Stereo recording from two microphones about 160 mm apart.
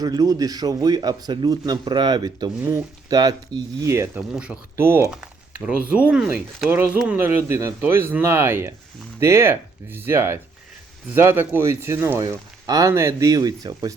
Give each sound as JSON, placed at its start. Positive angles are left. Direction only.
{"t": 0.0, "sound": "speech", "side_deg": -25}
{"t": 4.3, "sound": "speech", "side_deg": -5}